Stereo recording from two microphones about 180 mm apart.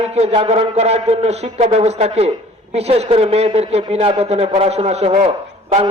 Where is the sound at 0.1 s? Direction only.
35° right (ahead or behind).